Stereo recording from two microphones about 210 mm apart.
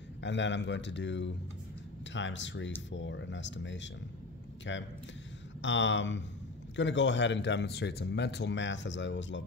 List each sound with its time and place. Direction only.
0.2 s speech: 60° left (ahead or behind)